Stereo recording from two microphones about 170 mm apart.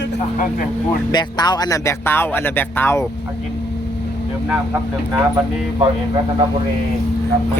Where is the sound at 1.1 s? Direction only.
25° left (ahead or behind).